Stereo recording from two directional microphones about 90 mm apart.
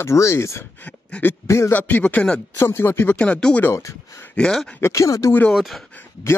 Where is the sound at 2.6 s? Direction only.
25° left (ahead or behind).